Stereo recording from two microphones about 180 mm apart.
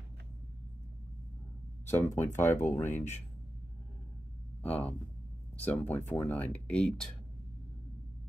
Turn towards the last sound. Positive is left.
turn(degrees=5)  # may be behind; listen again after turning